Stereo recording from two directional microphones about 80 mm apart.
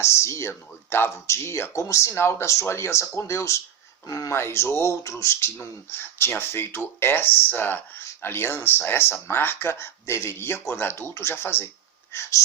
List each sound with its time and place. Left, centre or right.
0.0 s speech: left